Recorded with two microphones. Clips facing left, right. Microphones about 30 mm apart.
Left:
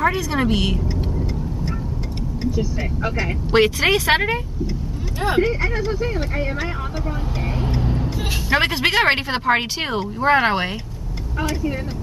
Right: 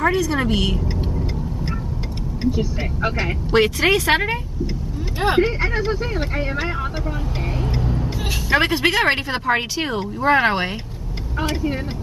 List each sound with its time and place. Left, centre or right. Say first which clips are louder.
0.0 s a woman's voice: right 1 dB; centre
2.4 s speech: right 2 dB; right
3.5 s speech: even; centre
5.2 s speech: right 1 dB; right
7.8 s speech: left 1 dB; centre